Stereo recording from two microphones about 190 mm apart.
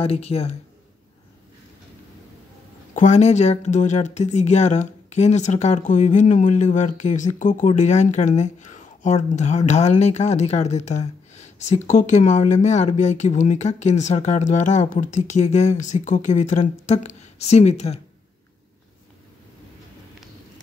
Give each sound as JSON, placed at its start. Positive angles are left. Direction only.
{"t": 0.0, "sound": "speech", "side_deg": 30}
{"t": 2.9, "sound": "speech", "side_deg": 40}